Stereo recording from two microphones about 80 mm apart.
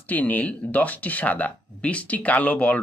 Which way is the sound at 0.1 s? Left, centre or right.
Centre.